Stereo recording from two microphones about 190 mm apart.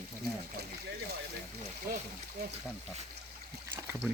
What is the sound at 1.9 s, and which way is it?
Speech, 50° right (ahead or behind).